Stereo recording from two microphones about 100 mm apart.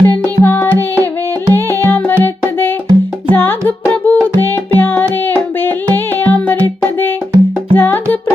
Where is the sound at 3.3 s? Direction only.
20° left (ahead or behind).